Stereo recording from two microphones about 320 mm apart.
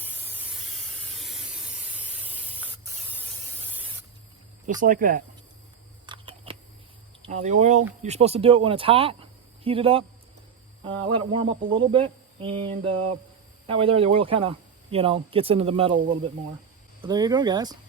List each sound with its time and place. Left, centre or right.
0.0 s spray: centre
4.8 s speech: right
6.1 s a sound: centre
7.4 s speech: right
11.3 s speech: centre